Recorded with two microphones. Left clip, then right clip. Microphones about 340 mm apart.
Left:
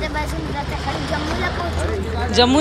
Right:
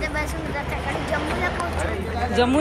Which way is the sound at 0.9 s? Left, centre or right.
Right.